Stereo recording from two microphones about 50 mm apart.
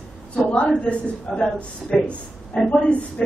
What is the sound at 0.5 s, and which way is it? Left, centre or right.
A woman's voice, left.